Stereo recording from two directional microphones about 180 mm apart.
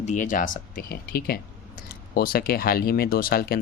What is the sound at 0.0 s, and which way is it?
Speech, 45° left (ahead or behind).